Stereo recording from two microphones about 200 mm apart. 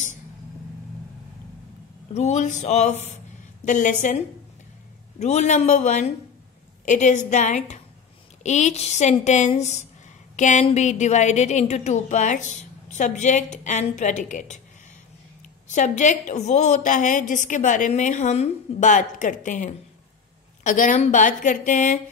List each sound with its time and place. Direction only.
2.1 s a woman's voice: 35° left (ahead or behind)
5.2 s a woman's voice: 35° left (ahead or behind)
15.7 s a woman's voice: 40° left (ahead or behind)